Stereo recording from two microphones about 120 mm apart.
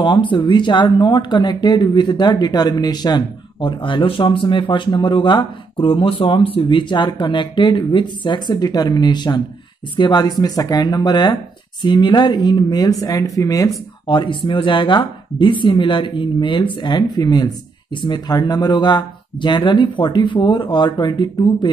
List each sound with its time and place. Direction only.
0.0 s speech: 40° left (ahead or behind)
14.0 s speech: 40° left (ahead or behind)